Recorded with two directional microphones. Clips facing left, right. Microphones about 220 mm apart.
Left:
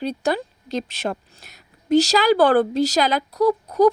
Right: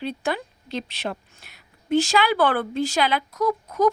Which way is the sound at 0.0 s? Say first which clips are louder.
Left 4 dB; 40° left (ahead or behind).